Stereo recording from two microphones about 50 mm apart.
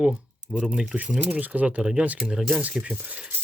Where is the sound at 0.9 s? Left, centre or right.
Centre.